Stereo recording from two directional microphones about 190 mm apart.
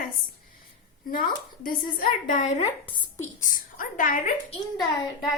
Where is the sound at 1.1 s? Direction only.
45° left (ahead or behind).